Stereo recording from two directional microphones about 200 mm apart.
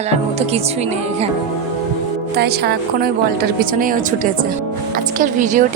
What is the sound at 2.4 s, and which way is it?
A woman's voice, 50° right (ahead or behind).